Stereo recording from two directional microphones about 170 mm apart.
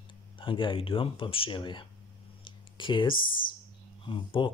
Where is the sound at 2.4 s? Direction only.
30° left (ahead or behind).